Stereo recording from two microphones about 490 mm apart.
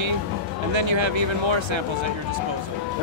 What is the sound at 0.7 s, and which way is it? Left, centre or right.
Speech, right.